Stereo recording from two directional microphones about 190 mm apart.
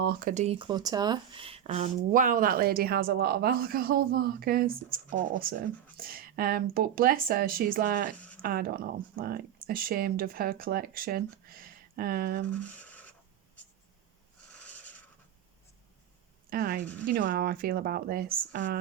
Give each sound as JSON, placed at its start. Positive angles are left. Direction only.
{"t": 0.0, "sound": "speech", "side_deg": -50}
{"t": 2.0, "sound": "speech", "side_deg": -45}
{"t": 12.5, "sound": "a sound", "side_deg": 5}
{"t": 14.4, "sound": "owl", "side_deg": 5}
{"t": 16.5, "sound": "a woman's voice", "side_deg": -50}